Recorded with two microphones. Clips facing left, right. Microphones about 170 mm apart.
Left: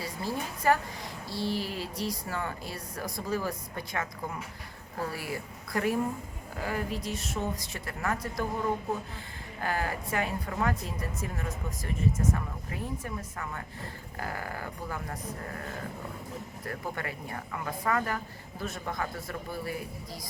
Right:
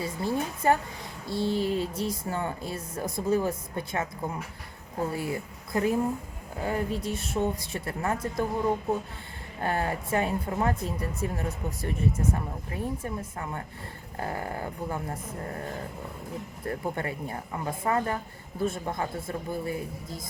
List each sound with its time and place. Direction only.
0.0 s speech: 25° right (ahead or behind)
7.0 s speech: 55° right (ahead or behind)
7.4 s speech: 30° right (ahead or behind)
9.6 s speech: 25° right (ahead or behind)
16.6 s speech: 25° right (ahead or behind)